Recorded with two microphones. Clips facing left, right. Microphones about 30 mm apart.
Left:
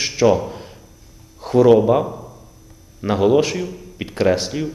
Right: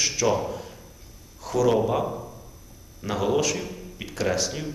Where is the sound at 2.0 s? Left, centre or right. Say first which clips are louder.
Left 1 dB; centre.